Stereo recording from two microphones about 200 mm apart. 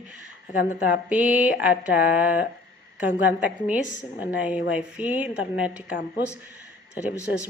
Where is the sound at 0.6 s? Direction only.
45° left (ahead or behind).